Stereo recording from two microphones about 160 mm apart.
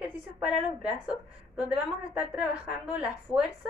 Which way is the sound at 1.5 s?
10° right (ahead or behind).